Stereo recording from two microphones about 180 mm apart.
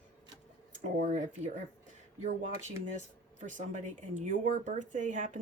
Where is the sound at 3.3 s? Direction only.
45° right (ahead or behind).